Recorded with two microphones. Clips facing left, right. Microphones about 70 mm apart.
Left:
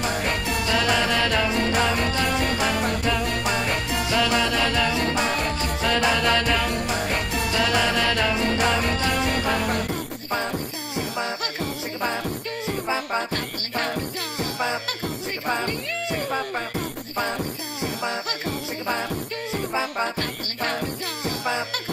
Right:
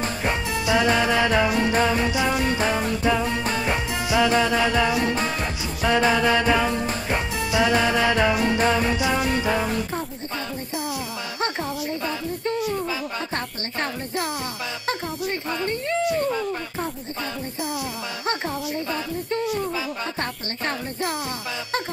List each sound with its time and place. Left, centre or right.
0.2 s music: centre
2.5 s music: right
3.6 s music: centre
12.6 s music: left
15.4 s a sound: left